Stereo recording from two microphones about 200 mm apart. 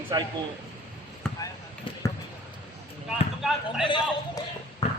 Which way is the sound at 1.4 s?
15° left (ahead or behind).